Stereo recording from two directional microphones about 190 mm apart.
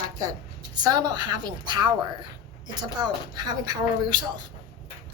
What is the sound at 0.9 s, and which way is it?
Speech, 20° right (ahead or behind).